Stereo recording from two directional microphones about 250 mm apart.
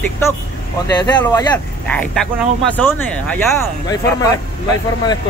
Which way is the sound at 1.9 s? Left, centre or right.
Centre.